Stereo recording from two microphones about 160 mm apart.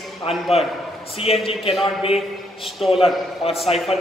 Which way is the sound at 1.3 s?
35° left (ahead or behind).